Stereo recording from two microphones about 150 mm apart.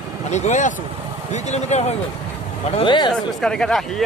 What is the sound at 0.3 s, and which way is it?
Speech, 50° left (ahead or behind).